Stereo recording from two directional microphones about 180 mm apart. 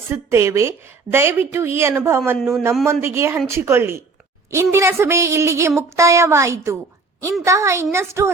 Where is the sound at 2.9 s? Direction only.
15° right (ahead or behind).